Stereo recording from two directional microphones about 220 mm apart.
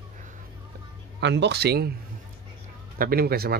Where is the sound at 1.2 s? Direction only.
50° right (ahead or behind).